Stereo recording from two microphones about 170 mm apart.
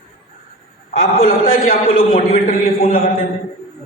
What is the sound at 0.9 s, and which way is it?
A man's voice, 50° left (ahead or behind).